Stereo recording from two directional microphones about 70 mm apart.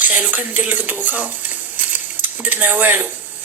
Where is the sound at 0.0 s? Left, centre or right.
Right.